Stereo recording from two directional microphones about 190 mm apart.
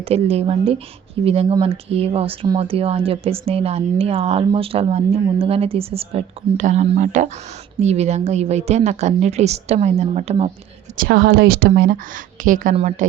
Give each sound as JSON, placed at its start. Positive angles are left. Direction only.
{"t": 0.0, "sound": "speech", "side_deg": -30}
{"t": 10.9, "sound": "a woman's voice", "side_deg": -55}